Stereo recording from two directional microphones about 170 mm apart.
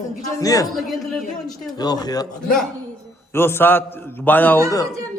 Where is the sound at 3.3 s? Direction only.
15° left (ahead or behind).